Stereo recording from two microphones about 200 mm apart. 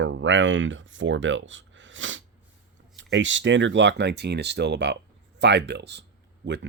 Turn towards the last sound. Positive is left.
turn(degrees=-60)  # may be behind; listen again after turning